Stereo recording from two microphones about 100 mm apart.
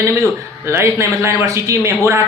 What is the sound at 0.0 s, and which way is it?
A man's voice, 30° right (ahead or behind).